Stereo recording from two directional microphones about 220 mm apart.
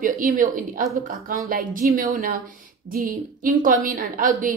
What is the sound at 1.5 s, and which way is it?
A woman's voice, 35° right (ahead or behind).